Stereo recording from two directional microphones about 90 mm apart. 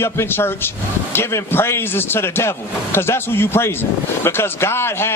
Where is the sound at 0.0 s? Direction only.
25° left (ahead or behind).